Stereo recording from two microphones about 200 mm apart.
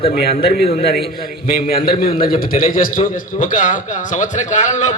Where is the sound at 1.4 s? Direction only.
50° left (ahead or behind).